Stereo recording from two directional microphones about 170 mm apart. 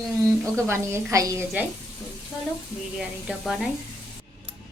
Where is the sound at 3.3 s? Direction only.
5° right (ahead or behind).